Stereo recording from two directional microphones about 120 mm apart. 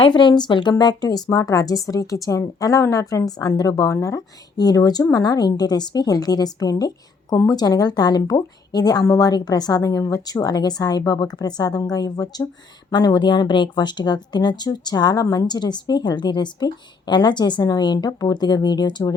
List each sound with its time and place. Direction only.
0.0 s a woman's voice: 40° left (ahead or behind)